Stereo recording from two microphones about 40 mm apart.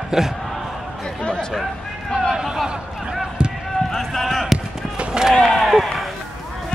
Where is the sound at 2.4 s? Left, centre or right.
Centre.